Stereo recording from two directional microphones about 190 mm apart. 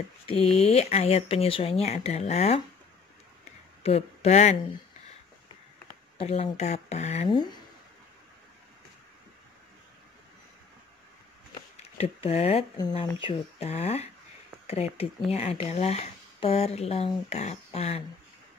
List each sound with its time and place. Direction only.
0.3 s speech: 30° left (ahead or behind)
3.8 s speech: 35° left (ahead or behind)
6.1 s speech: 35° left (ahead or behind)
11.7 s speech: 35° left (ahead or behind)